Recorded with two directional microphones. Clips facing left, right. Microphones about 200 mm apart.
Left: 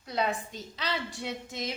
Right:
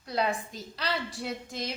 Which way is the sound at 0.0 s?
Centre (ahead or behind).